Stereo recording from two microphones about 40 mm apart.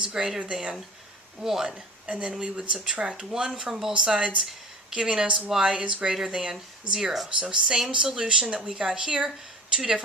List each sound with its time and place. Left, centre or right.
0.0 s speech: centre
1.7 s a woman's voice: right
3.5 s speech: centre
3.9 s speech: right
6.1 s speech: centre
7.3 s speech: right